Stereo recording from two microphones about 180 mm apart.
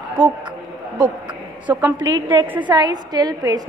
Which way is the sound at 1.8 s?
20° right (ahead or behind).